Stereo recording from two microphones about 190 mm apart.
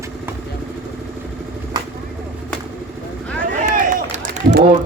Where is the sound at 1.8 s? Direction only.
20° right (ahead or behind).